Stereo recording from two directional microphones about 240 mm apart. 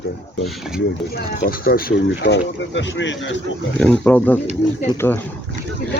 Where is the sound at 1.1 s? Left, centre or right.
Left.